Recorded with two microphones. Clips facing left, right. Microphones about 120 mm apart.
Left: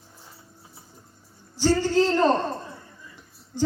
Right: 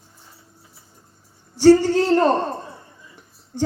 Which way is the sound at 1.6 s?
60° right (ahead or behind).